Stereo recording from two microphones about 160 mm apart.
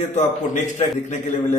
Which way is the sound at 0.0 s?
50° left (ahead or behind).